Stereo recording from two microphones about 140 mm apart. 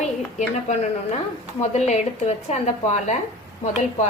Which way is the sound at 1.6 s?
55° left (ahead or behind).